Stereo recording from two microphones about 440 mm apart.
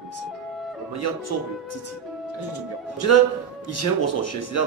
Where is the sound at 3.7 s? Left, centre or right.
Left.